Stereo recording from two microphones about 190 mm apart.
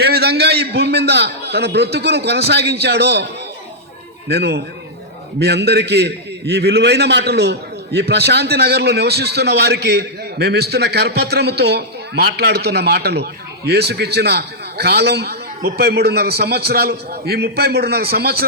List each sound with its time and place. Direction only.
0.0 s a man's voice: 60° right (ahead or behind)
4.3 s a man's voice: 60° right (ahead or behind)